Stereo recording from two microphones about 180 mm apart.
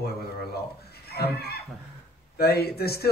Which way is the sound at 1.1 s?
60° left (ahead or behind).